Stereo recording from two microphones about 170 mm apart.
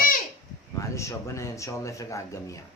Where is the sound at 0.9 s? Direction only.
15° left (ahead or behind).